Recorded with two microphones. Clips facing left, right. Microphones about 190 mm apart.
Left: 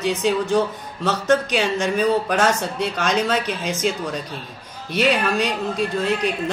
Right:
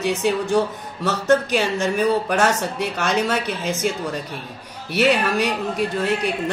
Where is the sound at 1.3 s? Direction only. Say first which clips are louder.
Right 1 dB; 15° left (ahead or behind).